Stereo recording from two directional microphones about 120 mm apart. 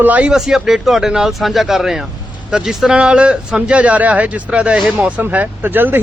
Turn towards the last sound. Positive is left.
turn(degrees=-15)  # may be behind; listen again after turning